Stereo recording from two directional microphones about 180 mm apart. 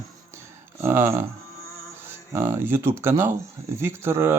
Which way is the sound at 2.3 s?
15° right (ahead or behind).